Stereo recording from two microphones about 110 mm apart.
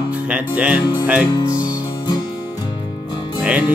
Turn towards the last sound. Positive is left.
turn(degrees=-10)  # may be behind; listen again after turning